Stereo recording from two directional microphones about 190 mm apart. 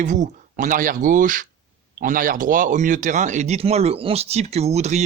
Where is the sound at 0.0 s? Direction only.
40° right (ahead or behind).